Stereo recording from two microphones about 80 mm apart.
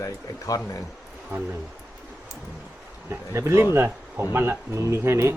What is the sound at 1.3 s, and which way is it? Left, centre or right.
Speech, right.